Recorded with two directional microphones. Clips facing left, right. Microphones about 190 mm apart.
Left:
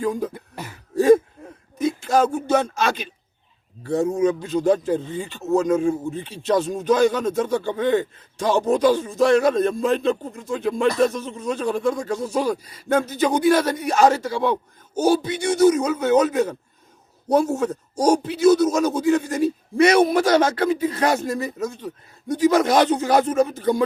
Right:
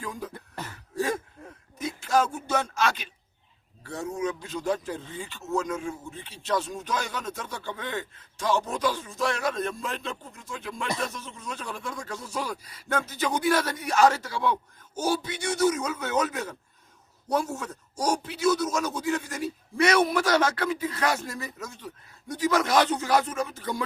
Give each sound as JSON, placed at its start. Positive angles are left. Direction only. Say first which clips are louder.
{"t": 0.3, "sound": "throat clearing", "louder": "left 3 dB", "side_deg": 10}
{"t": 1.8, "sound": "a sound", "louder": "left 6 dB", "side_deg": 20}
{"t": 2.5, "sound": "speech", "louder": "left 6 dB", "side_deg": 20}
{"t": 5.5, "sound": "speech", "louder": "left 11 dB", "side_deg": 35}
{"t": 6.2, "sound": "speech", "louder": "left 7 dB", "side_deg": 20}
{"t": 11.1, "sound": "a man's voice", "louder": "left 12 dB", "side_deg": 20}
{"t": 23.4, "sound": "speech", "louder": "left 12 dB", "side_deg": 35}